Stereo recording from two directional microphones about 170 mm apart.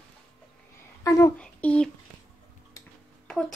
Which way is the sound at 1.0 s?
20° left (ahead or behind).